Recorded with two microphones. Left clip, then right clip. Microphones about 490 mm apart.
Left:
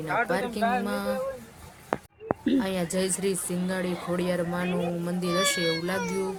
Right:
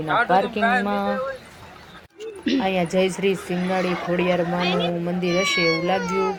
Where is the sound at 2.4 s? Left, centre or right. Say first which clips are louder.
Right 8 dB; left.